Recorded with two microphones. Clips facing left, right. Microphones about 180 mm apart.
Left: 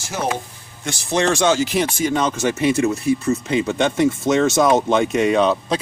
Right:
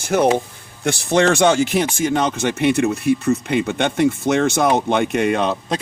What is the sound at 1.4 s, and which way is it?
Speech, 60° right (ahead or behind).